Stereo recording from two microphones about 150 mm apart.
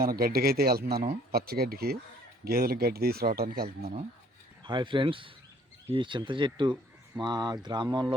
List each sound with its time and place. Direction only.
0.0 s speech: 85° right
4.6 s speech: 30° right (ahead or behind)